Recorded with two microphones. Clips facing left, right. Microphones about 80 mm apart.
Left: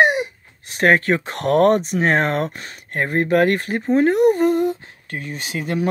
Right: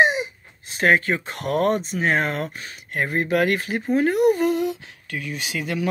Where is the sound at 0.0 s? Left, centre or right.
Left.